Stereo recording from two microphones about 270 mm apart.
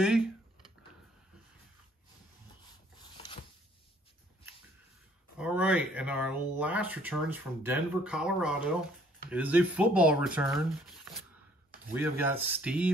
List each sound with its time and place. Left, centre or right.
0.0 s typing: centre
3.0 s a sound: centre
5.4 s speech: centre